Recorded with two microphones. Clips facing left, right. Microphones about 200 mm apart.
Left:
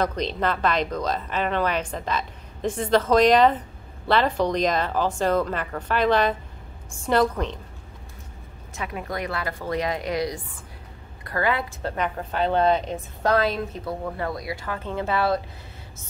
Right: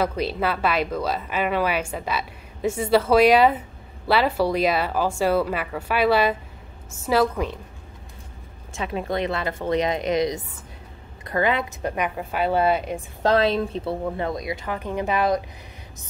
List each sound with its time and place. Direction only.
0.0 s a woman's voice: 5° right (ahead or behind)
8.7 s a woman's voice: 25° right (ahead or behind); by 13.0 s 10° right (ahead or behind)
13.2 s a woman's voice: 25° right (ahead or behind)